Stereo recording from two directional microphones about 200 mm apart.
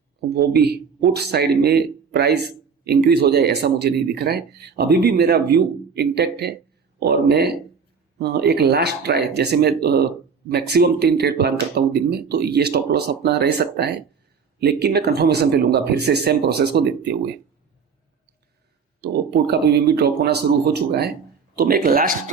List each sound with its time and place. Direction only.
0.7 s speech: 55° right (ahead or behind)
19.0 s speech: 55° right (ahead or behind)